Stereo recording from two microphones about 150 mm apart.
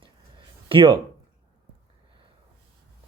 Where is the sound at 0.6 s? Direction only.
35° right (ahead or behind).